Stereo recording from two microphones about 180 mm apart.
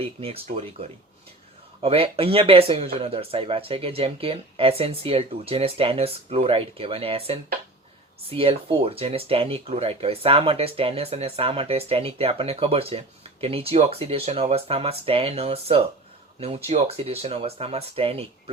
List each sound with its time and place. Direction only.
0.0 s speech: 30° right (ahead or behind)